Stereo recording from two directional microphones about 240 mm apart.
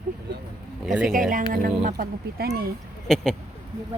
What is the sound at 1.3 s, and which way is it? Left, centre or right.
Speech, right.